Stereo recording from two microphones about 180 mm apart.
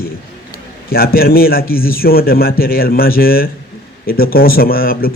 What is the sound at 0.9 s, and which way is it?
A man's voice, 55° left (ahead or behind).